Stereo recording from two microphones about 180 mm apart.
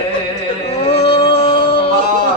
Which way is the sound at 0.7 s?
35° left (ahead or behind).